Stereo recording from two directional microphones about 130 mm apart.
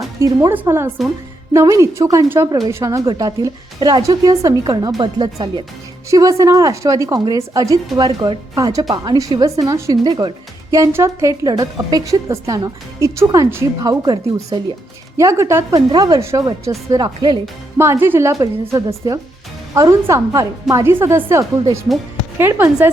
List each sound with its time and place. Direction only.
0.2 s a woman's voice: 25° right (ahead or behind)
2.5 s speech: 30° right (ahead or behind)
10.0 s speech: 35° right (ahead or behind); by 14.0 s 20° right (ahead or behind)
14.0 s speech: 30° right (ahead or behind)
17.7 s a woman's voice: 20° right (ahead or behind)